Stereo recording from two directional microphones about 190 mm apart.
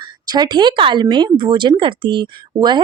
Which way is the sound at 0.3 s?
20° right (ahead or behind).